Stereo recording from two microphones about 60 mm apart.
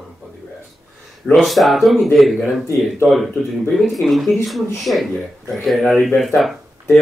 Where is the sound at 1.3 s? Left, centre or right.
Centre.